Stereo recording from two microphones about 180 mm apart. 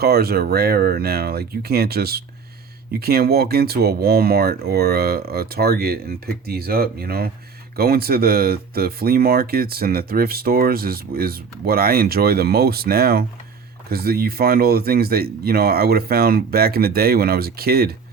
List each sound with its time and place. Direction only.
0.0 s speech: 60° right (ahead or behind)